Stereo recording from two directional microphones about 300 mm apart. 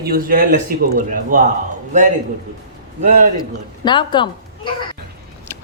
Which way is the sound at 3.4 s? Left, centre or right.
Centre.